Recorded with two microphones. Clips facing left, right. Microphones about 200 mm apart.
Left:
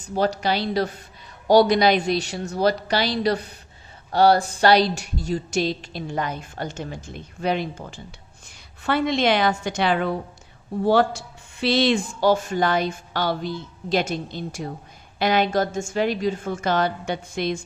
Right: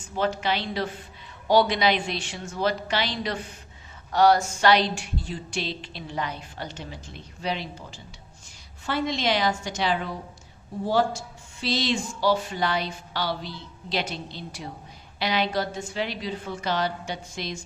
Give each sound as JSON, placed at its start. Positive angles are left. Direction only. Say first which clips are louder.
{"t": 0.0, "sound": "a woman's voice", "louder": "left 4 dB", "side_deg": 40}